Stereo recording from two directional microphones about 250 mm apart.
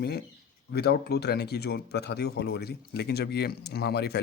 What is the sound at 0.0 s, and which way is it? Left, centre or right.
Speech, left.